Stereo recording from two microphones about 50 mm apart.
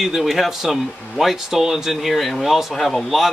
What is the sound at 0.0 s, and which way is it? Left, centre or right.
Speech, centre.